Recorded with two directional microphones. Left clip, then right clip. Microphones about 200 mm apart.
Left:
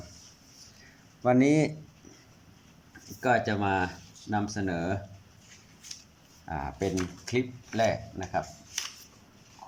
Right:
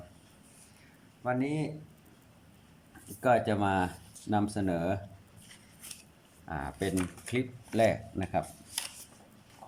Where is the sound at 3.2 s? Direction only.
10° right (ahead or behind).